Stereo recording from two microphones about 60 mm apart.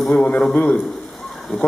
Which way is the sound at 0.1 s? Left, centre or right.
Centre.